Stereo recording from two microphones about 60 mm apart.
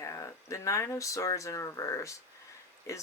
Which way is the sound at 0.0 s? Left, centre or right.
Left.